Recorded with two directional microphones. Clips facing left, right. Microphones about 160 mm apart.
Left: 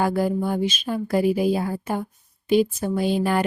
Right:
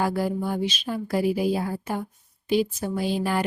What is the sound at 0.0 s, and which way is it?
A woman's voice, 50° left (ahead or behind).